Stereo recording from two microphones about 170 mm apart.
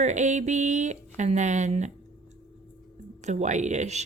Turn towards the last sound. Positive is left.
turn(degrees=-45)  # may be behind; listen again after turning